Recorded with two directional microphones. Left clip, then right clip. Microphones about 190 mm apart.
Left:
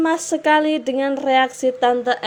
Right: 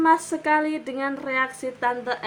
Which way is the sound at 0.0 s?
20° left (ahead or behind).